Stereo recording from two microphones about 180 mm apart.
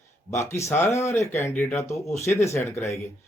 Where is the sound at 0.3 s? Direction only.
15° left (ahead or behind).